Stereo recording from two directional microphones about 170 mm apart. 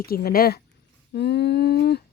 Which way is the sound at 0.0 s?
65° left (ahead or behind).